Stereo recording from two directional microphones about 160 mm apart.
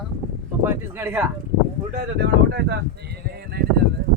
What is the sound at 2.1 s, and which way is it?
Speech, 90° right.